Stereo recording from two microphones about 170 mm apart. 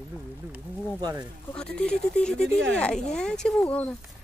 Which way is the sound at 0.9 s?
20° right (ahead or behind).